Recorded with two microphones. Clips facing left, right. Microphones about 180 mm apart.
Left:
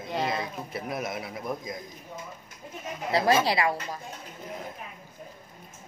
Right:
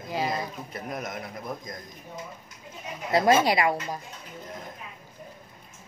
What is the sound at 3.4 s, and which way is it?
Speech, 20° right (ahead or behind).